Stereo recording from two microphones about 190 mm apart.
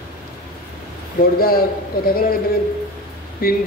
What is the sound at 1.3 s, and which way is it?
A man's voice, 50° left (ahead or behind).